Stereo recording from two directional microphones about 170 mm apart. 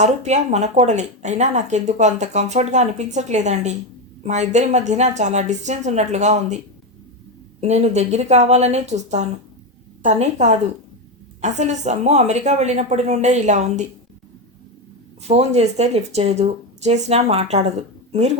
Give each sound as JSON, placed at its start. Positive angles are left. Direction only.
{"t": 0.0, "sound": "speech", "side_deg": -45}
{"t": 7.6, "sound": "speech", "side_deg": -40}
{"t": 15.3, "sound": "speech", "side_deg": -40}